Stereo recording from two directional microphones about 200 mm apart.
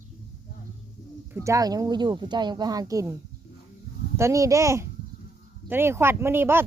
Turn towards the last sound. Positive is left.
turn(degrees=-10)  # may be behind; listen again after turning